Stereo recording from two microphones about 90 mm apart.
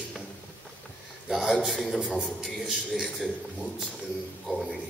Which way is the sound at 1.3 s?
5° right (ahead or behind).